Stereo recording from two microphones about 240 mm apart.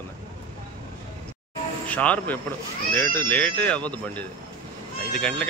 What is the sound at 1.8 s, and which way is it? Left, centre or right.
Speech, centre.